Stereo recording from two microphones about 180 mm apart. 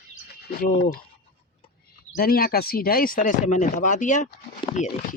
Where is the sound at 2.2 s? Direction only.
55° left (ahead or behind).